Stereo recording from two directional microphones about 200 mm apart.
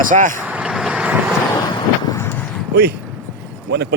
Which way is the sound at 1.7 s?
15° left (ahead or behind).